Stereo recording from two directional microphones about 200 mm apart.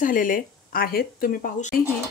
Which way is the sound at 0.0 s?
40° left (ahead or behind).